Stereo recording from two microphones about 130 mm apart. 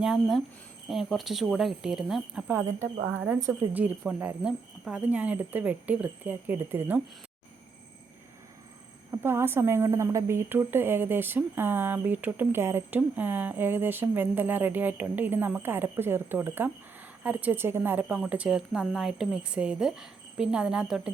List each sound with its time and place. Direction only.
0.0 s speech: 5° right (ahead or behind)
3.4 s a woman's voice: 15° right (ahead or behind)
9.2 s a woman's voice: 20° right (ahead or behind)